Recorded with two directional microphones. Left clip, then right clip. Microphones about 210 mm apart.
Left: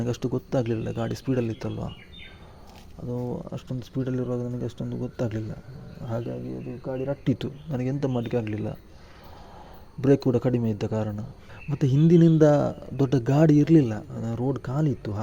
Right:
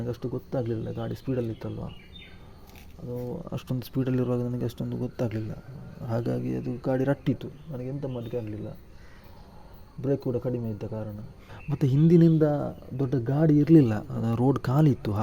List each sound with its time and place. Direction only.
0.0 s speech: 10° left (ahead or behind)
3.1 s speech: 10° left (ahead or behind)
3.5 s speech: 10° right (ahead or behind)
6.1 s speech: 15° right (ahead or behind)
6.5 s speech: 30° right (ahead or behind)
7.3 s speech: 20° left (ahead or behind)
10.0 s speech: 20° left (ahead or behind)
11.7 s speech: centre (ahead or behind)
13.7 s speech: 15° right (ahead or behind)